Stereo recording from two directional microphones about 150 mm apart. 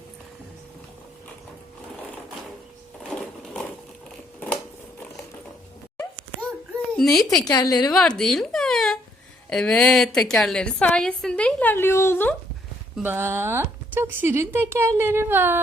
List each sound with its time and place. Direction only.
3.1 s sewing machine: 5° left (ahead or behind)
6.9 s a woman's voice: centre (ahead or behind)
7.3 s a woman's voice: 25° left (ahead or behind)
7.9 s a sound: 5° left (ahead or behind)
9.5 s a woman's voice: 5° left (ahead or behind)
13.0 s a woman's voice: 15° right (ahead or behind)